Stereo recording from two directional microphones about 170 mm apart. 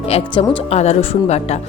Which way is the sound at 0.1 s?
35° left (ahead or behind).